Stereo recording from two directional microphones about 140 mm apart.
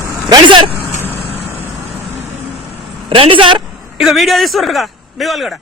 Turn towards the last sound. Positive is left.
turn(degrees=0)  # may be behind; listen again after turning